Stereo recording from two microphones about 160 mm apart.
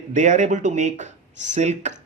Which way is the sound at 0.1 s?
50° right (ahead or behind).